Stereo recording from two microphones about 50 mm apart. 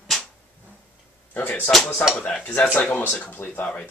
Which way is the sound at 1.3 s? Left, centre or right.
Left.